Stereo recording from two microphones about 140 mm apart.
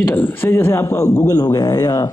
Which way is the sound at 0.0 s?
15° left (ahead or behind).